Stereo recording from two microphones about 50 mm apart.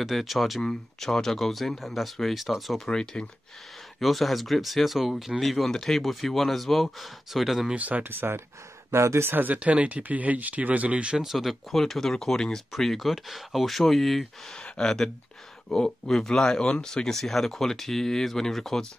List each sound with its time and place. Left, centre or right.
0.0 s speech: centre
2.9 s speech: centre
4.0 s speech: centre
7.7 s speech: right
8.1 s speech: right
8.9 s speech: right
9.6 s speech: right
11.1 s speech: centre
14.5 s speech: centre